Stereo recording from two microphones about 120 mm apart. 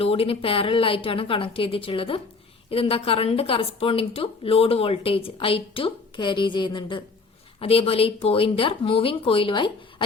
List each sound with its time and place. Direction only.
0.0 s a woman's voice: 50° left (ahead or behind)
7.6 s a woman's voice: 55° left (ahead or behind)